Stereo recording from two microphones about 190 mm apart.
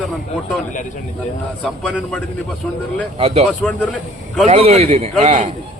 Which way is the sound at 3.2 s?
30° right (ahead or behind).